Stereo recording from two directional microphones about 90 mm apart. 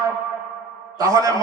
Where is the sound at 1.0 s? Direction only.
40° right (ahead or behind).